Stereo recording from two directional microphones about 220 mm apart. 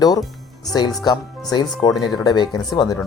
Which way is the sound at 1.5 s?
20° left (ahead or behind).